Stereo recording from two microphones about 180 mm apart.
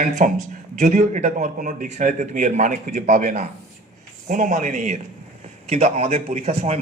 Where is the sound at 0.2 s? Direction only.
45° right (ahead or behind).